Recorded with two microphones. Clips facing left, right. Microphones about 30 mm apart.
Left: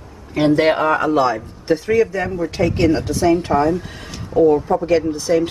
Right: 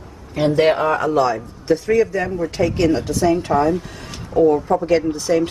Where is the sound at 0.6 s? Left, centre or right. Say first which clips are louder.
Even; centre.